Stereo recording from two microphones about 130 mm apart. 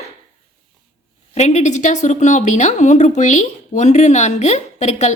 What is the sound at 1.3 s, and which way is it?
A woman's voice, 60° left (ahead or behind).